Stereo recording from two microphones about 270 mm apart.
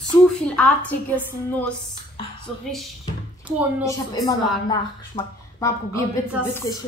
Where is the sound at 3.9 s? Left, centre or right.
Centre.